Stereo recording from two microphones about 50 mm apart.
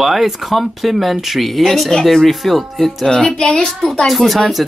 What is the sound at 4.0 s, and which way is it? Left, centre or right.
Speech, centre.